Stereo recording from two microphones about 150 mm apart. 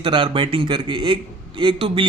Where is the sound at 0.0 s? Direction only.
35° right (ahead or behind).